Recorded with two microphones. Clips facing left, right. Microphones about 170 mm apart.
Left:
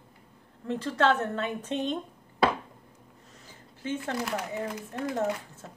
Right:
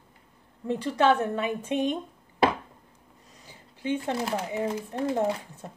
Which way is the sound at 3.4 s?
15° right (ahead or behind).